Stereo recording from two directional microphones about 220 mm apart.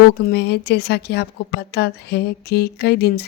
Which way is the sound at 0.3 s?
50° left (ahead or behind).